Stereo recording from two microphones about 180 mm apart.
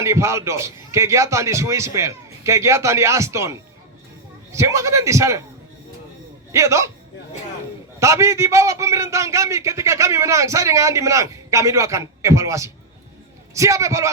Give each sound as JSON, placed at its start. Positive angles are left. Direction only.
{"t": 0.0, "sound": "a man's voice", "side_deg": -15}
{"t": 6.5, "sound": "a man's voice", "side_deg": -15}
{"t": 7.9, "sound": "a man's voice", "side_deg": -15}